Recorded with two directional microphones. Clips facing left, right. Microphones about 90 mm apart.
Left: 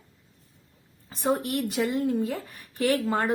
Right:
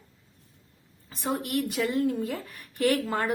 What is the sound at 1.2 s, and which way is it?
Speech, 35° left (ahead or behind).